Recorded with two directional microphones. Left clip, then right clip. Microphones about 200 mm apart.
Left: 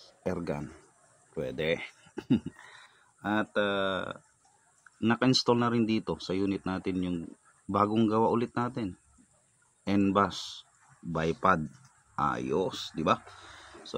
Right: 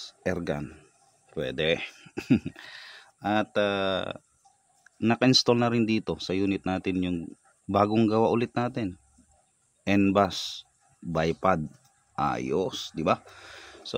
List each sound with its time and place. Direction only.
0.0 s speech: 40° right (ahead or behind)
5.0 s speech: 35° right (ahead or behind)